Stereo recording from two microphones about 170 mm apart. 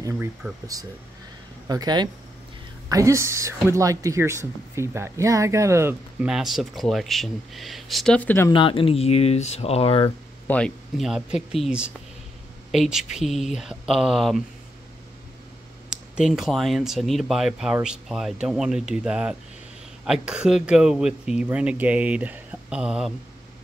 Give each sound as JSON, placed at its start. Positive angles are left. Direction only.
{"t": 0.0, "sound": "speech", "side_deg": -15}
{"t": 1.7, "sound": "speech", "side_deg": -25}
{"t": 8.5, "sound": "speech", "side_deg": 30}
{"t": 10.5, "sound": "speech", "side_deg": 0}
{"t": 15.9, "sound": "speech", "side_deg": -5}